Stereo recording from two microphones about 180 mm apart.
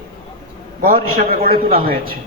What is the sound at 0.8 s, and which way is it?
A man's voice, 50° right (ahead or behind).